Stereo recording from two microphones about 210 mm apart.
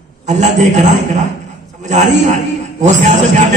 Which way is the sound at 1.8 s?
35° right (ahead or behind).